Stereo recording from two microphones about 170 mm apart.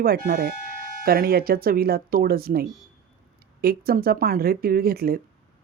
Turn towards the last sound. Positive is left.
turn(degrees=-60)  # may be behind; listen again after turning